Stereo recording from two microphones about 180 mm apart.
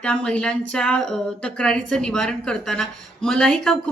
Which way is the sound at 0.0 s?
5° left (ahead or behind).